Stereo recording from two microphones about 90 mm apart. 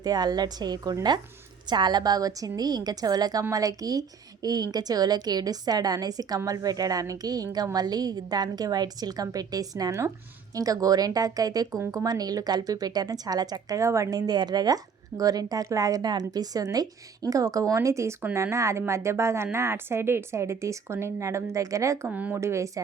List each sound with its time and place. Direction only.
0.0 s a woman's voice: 50° right (ahead or behind)
22.0 s speech: 20° right (ahead or behind)
22.4 s speech: 35° right (ahead or behind)